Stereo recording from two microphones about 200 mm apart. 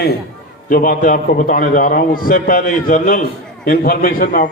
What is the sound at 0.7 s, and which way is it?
A man's voice, 45° left (ahead or behind).